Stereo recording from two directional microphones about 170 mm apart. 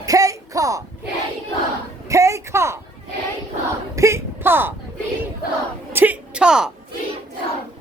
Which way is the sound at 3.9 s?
15° right (ahead or behind).